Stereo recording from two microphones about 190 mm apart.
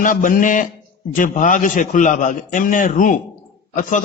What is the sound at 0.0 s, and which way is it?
A man's voice, 45° left (ahead or behind).